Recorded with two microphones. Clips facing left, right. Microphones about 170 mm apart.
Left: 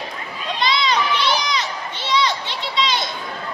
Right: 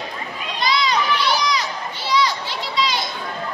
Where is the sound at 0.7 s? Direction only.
Centre (ahead or behind).